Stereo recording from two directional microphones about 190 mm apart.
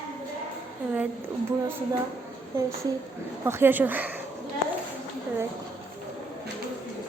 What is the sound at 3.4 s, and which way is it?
Speech, 10° right (ahead or behind).